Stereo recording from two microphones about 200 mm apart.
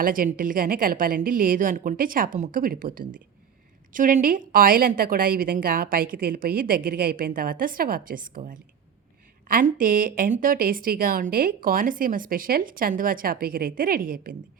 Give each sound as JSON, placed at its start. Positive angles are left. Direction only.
{"t": 0.0, "sound": "a woman's voice", "side_deg": -45}